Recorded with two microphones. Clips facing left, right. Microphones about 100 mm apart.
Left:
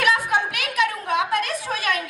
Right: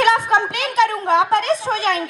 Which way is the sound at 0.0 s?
25° right (ahead or behind).